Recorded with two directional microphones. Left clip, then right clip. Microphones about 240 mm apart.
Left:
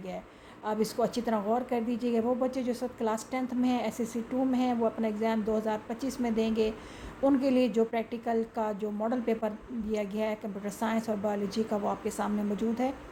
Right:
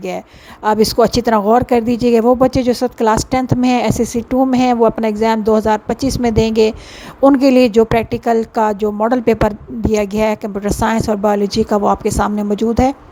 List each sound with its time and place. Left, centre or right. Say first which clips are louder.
0.6 s speech: right 18 dB; right